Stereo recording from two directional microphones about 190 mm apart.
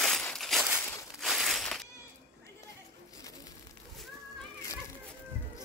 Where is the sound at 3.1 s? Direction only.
20° left (ahead or behind).